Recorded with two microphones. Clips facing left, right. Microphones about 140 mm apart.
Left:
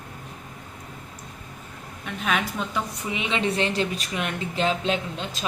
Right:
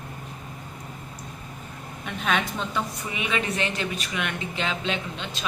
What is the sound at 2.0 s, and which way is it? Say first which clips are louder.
A woman's voice: even; 5° left (ahead or behind).